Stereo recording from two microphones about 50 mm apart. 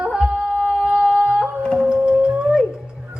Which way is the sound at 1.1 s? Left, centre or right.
Centre.